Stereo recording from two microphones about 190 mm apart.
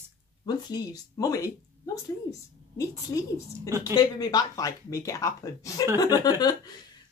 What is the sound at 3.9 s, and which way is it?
A woman's voice, 20° left (ahead or behind).